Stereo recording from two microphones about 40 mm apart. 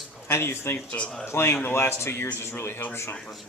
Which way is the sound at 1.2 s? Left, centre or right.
Left.